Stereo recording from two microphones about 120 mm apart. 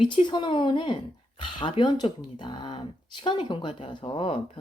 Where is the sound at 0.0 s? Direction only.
40° left (ahead or behind).